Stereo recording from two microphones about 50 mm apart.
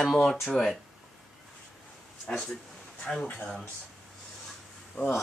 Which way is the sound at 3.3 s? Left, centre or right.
Left.